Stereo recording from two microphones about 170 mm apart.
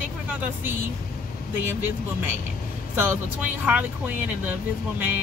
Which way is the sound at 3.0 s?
10° right (ahead or behind).